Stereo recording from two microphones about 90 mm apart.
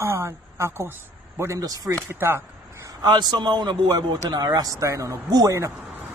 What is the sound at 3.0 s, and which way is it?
A man's voice, 50° right (ahead or behind).